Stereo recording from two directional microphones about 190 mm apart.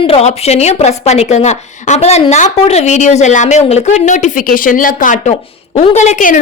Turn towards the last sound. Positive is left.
turn(degrees=40)  # may be behind; listen again after turning